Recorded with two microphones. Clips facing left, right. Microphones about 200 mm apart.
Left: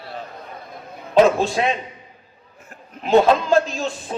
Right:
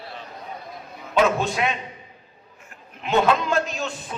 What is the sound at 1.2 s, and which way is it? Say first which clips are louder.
A man's voice: left 5 dB; 30° left (ahead or behind).